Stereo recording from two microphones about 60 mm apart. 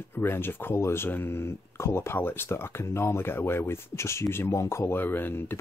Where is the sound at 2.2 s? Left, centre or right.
Left.